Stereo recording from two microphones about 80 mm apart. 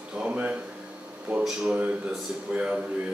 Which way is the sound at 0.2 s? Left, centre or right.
Centre.